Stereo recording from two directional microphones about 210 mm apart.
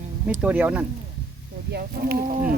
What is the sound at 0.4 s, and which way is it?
Speech, 5° right (ahead or behind).